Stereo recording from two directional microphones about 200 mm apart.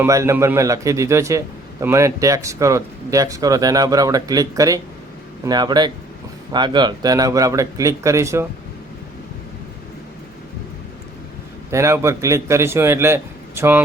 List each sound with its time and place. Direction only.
0.0 s a man's voice: 15° right (ahead or behind)
11.7 s a man's voice: 15° right (ahead or behind)